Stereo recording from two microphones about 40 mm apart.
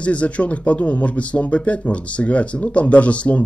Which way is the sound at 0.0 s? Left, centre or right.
Left.